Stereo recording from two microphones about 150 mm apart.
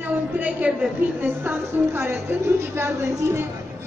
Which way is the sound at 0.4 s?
10° right (ahead or behind).